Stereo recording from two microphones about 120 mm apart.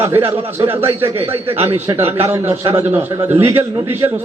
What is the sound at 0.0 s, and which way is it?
A man's voice, 20° right (ahead or behind).